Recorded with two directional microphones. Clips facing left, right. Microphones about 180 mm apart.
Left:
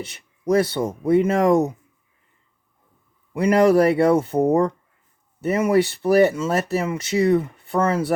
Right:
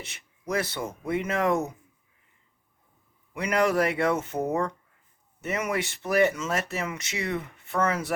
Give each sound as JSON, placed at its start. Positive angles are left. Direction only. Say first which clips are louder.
{"t": 0.0, "sound": "speech", "louder": "left 11 dB", "side_deg": 30}
{"t": 3.3, "sound": "speech", "louder": "left 9 dB", "side_deg": 30}